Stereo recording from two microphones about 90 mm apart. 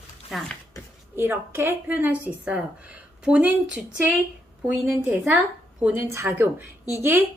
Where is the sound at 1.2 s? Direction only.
25° right (ahead or behind).